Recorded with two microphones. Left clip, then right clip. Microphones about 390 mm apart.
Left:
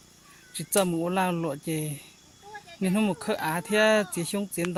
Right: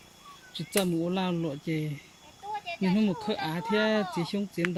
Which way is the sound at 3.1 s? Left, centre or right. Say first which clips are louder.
Left 3 dB; centre.